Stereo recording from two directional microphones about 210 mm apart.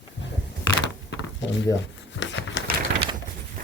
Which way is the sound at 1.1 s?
60° left (ahead or behind).